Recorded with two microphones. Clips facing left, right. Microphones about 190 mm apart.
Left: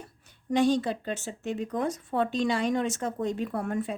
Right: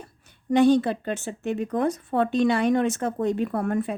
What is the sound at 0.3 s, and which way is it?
A woman's voice, 60° right (ahead or behind).